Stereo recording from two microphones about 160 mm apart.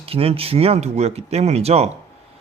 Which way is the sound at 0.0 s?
35° right (ahead or behind).